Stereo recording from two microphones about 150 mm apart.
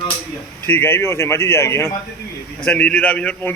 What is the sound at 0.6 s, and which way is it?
Speech, 15° left (ahead or behind).